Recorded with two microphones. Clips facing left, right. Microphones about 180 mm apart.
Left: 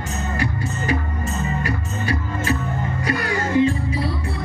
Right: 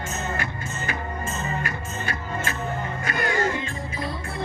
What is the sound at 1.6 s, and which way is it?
Music, 35° left (ahead or behind).